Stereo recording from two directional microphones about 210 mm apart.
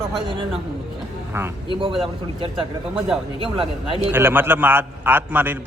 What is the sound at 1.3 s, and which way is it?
Speech, 10° right (ahead or behind).